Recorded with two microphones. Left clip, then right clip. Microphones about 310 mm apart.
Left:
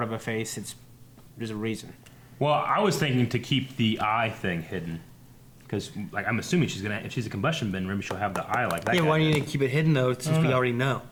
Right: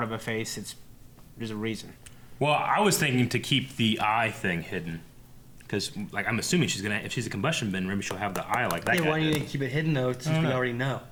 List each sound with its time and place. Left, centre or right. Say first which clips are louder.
0.0 s speech: left 1 dB; left
2.4 s speech: even; left
6.1 s speech: even; left
9.0 s speech: left 2 dB; right
10.2 s speech: left 2 dB; left
10.5 s speech: left 5 dB; right